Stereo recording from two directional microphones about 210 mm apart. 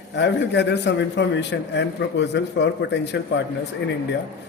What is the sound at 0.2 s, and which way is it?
A man's voice, 55° left (ahead or behind).